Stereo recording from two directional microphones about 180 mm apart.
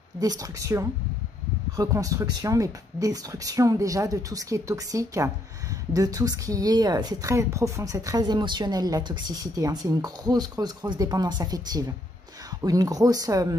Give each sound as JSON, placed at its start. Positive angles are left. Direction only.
{"t": 0.2, "sound": "speech", "side_deg": -20}